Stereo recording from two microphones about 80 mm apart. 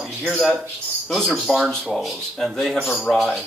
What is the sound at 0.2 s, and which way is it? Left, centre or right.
Speech, centre.